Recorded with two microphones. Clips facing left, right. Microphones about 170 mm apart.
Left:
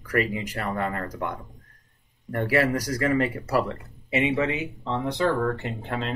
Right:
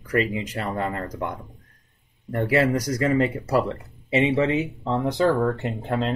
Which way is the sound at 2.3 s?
25° right (ahead or behind).